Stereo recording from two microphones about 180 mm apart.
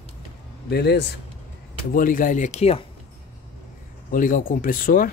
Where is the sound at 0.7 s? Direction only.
65° left (ahead or behind).